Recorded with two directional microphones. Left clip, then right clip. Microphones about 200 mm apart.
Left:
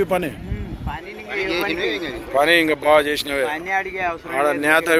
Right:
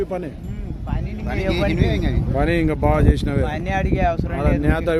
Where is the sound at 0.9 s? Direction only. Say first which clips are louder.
Left 1 dB; 60° right (ahead or behind).